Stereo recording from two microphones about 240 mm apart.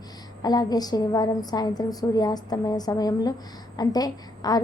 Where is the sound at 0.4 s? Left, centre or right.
Centre.